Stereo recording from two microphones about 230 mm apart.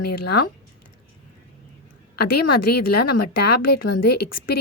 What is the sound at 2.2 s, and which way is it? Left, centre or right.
A woman's voice, left.